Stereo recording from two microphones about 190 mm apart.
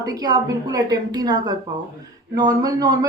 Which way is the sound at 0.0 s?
20° right (ahead or behind).